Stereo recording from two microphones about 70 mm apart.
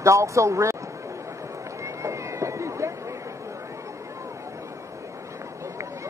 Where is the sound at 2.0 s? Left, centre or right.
Right.